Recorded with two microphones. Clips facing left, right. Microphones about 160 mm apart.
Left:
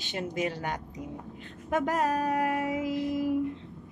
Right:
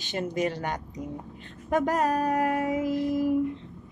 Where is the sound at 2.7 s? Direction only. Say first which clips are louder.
Right 3 dB; 45° right (ahead or behind).